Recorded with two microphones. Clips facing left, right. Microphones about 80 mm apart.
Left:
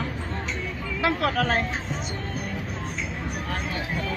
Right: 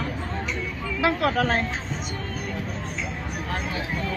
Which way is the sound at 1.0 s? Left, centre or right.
Centre.